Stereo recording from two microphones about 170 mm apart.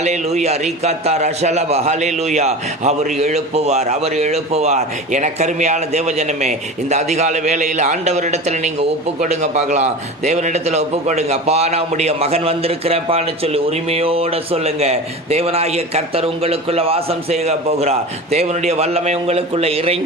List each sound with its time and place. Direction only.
0.0 s a man's voice: 40° right (ahead or behind)